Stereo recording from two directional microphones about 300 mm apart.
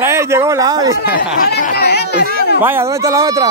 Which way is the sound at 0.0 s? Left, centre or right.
Centre.